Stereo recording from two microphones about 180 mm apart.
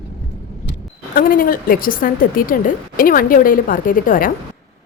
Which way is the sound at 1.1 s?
50° left (ahead or behind).